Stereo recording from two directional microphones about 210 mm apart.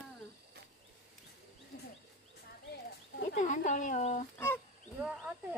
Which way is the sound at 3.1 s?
35° left (ahead or behind).